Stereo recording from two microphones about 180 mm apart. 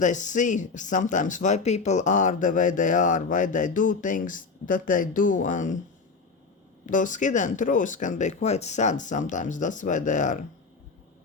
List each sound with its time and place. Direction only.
0.0 s speech: 45° left (ahead or behind)
6.8 s speech: 45° left (ahead or behind)